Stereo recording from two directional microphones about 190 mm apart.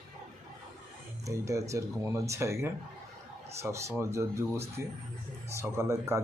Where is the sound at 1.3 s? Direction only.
15° right (ahead or behind).